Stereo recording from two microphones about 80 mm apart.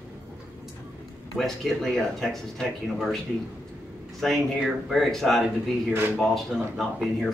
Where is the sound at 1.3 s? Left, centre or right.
Centre.